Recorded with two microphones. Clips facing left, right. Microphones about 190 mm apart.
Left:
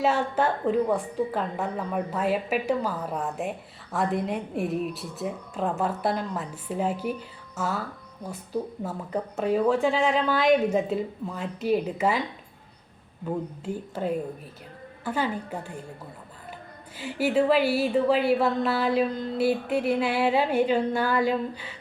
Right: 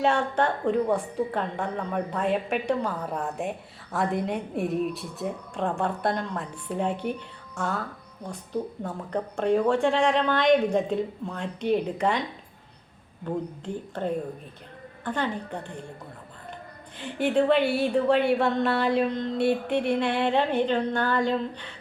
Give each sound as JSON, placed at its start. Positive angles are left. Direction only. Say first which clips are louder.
{"t": 0.0, "sound": "speech", "louder": "even", "side_deg": 5}
{"t": 13.3, "sound": "speech", "louder": "even", "side_deg": 5}
{"t": 17.0, "sound": "speech", "louder": "even", "side_deg": 5}